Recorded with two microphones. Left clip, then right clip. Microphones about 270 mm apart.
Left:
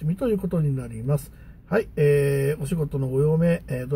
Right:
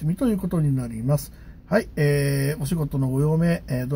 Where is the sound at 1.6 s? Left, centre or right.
Centre.